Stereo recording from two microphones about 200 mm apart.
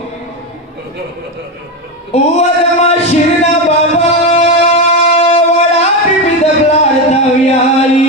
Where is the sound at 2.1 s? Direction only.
35° left (ahead or behind).